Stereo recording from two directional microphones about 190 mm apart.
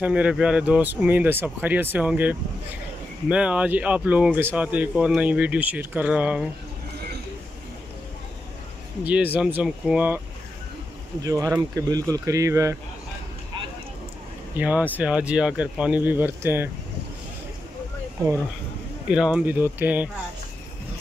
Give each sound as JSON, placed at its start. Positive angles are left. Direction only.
{"t": 0.0, "sound": "speech", "side_deg": -5}
{"t": 9.0, "sound": "speech", "side_deg": -10}
{"t": 11.2, "sound": "speech", "side_deg": -15}
{"t": 14.5, "sound": "speech", "side_deg": -10}
{"t": 19.0, "sound": "speech", "side_deg": -5}